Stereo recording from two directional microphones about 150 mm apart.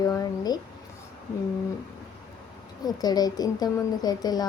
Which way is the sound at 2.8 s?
25° left (ahead or behind).